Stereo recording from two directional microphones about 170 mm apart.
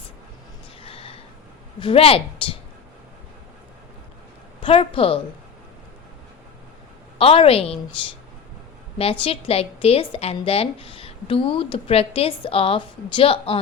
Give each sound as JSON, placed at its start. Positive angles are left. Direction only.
{"t": 0.8, "sound": "a sound", "side_deg": 35}
{"t": 1.8, "sound": "speech", "side_deg": 35}
{"t": 4.6, "sound": "speech", "side_deg": 30}
{"t": 7.2, "sound": "speech", "side_deg": 35}
{"t": 9.0, "sound": "speech", "side_deg": 35}